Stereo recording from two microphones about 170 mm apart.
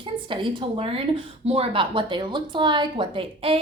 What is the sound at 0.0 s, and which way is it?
A woman's voice, 30° right (ahead or behind).